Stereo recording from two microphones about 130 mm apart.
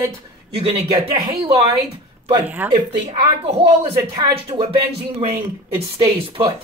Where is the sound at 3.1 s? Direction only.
50° right (ahead or behind).